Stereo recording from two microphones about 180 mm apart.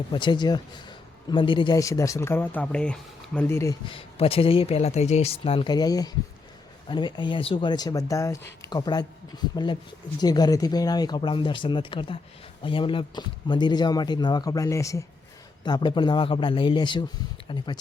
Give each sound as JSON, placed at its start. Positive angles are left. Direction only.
{"t": 0.1, "sound": "a man's voice", "side_deg": 25}
{"t": 3.8, "sound": "speech", "side_deg": 30}